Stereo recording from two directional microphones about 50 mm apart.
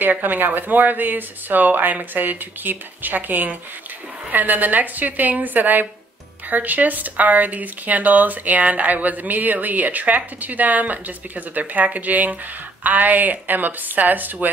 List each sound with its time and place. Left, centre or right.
0.0 s speech: right